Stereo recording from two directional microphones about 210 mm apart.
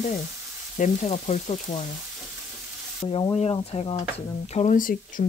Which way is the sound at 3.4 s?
30° left (ahead or behind).